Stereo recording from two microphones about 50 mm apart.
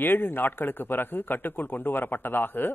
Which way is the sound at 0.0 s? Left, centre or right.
Left.